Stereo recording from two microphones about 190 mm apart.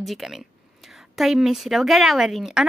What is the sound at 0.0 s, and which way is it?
Speech, centre (ahead or behind).